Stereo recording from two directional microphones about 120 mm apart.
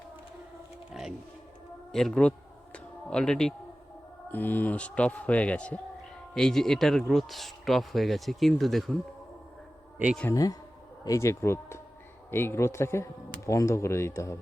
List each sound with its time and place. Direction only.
0.9 s music: 5° right (ahead or behind)
1.9 s speech: 5° left (ahead or behind)
2.7 s a sound: 5° left (ahead or behind)
4.3 s speech: 15° left (ahead or behind)
10.3 s speech: 30° left (ahead or behind)